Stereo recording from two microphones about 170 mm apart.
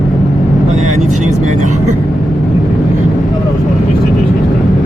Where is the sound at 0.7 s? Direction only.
45° right (ahead or behind).